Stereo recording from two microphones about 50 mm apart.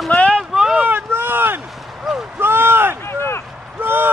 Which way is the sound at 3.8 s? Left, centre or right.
Right.